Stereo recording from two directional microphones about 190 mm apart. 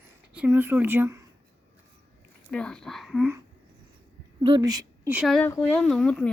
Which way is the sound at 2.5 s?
5° left (ahead or behind).